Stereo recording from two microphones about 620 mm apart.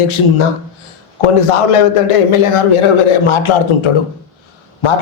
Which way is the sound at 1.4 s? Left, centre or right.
Left.